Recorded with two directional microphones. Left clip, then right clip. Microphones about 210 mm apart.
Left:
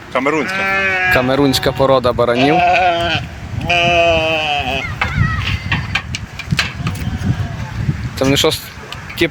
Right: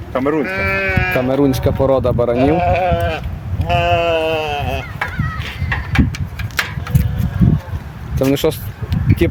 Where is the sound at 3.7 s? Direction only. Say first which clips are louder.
Left 3 dB; 35° right (ahead or behind).